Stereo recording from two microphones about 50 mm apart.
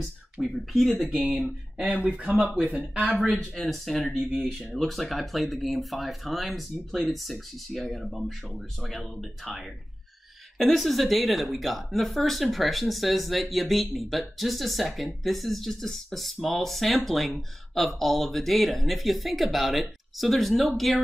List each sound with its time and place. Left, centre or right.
0.0 s speech: centre
1.2 s speech: centre
2.6 s speech: right
3.5 s speech: centre